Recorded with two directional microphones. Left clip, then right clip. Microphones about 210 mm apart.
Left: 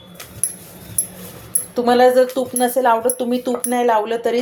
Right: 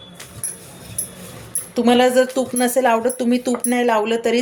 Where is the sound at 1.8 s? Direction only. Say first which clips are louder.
Left 2 dB; 10° right (ahead or behind).